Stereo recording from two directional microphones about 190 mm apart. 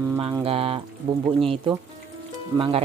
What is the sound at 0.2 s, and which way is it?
Speech, 30° right (ahead or behind).